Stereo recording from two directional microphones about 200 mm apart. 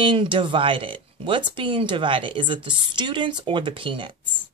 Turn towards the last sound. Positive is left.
turn(degrees=-25)  # may be behind; listen again after turning